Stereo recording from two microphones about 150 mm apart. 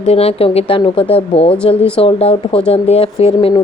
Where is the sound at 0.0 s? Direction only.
45° left (ahead or behind).